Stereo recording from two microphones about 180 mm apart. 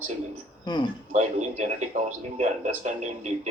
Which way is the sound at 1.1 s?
45° right (ahead or behind).